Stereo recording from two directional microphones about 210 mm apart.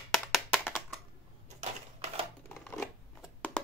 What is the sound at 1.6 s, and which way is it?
Typewriter, 30° right (ahead or behind).